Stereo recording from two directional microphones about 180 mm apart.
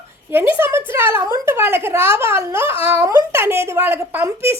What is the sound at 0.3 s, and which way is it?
A woman's voice, 10° right (ahead or behind).